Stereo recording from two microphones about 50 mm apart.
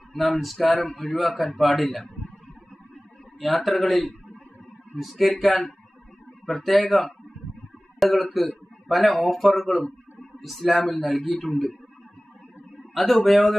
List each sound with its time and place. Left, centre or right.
0.2 s speech: centre
3.4 s speech: centre
5.1 s speech: centre
12.9 s speech: centre